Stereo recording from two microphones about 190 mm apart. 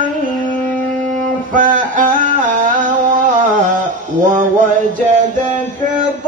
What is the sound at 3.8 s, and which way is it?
Mantra, 45° right (ahead or behind).